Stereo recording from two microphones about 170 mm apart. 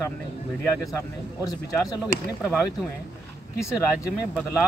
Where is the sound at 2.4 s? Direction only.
5° right (ahead or behind).